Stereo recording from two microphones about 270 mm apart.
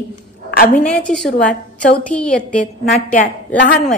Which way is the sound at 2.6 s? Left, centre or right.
Left.